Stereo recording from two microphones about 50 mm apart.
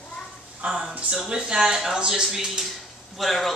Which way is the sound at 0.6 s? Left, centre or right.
Centre.